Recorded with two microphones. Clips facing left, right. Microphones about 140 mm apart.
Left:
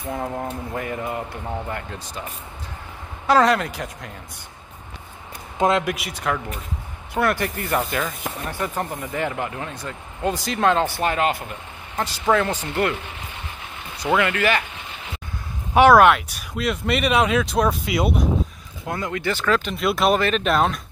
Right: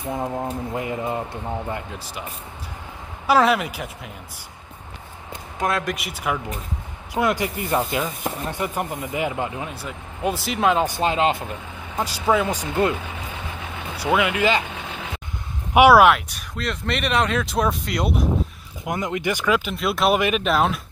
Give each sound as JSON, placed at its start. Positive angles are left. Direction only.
{"t": 0.1, "sound": "speech", "side_deg": -15}
{"t": 3.3, "sound": "speech", "side_deg": -5}
{"t": 5.6, "sound": "speech", "side_deg": 20}
{"t": 5.9, "sound": "speech", "side_deg": 0}
{"t": 12.0, "sound": "speech", "side_deg": -10}
{"t": 13.9, "sound": "speech", "side_deg": -10}
{"t": 15.7, "sound": "speech", "side_deg": -10}
{"t": 18.9, "sound": "speech", "side_deg": -20}
{"t": 19.7, "sound": "speech", "side_deg": 0}
{"t": 20.2, "sound": "speech", "side_deg": -10}